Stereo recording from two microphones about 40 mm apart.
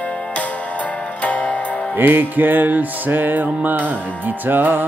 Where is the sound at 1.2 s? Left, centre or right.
Left.